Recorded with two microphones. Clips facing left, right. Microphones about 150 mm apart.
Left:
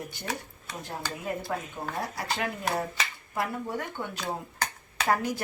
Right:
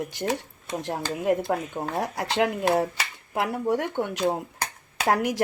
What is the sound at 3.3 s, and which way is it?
Speech, 85° right.